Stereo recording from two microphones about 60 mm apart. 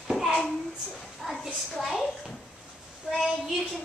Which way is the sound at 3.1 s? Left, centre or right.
Centre.